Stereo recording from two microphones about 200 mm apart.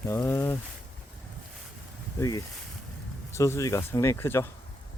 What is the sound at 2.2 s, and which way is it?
Speech, 15° left (ahead or behind).